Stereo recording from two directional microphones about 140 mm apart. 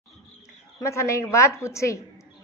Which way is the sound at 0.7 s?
20° left (ahead or behind).